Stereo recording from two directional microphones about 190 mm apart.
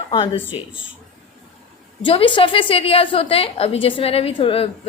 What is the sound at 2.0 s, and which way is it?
A woman's voice, 25° left (ahead or behind).